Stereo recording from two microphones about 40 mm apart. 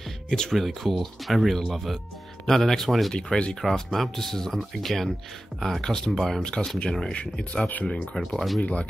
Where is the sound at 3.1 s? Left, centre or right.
Centre.